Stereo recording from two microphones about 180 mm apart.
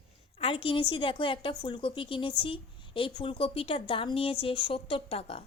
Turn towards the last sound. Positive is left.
turn(degrees=35)  # may be behind; listen again after turning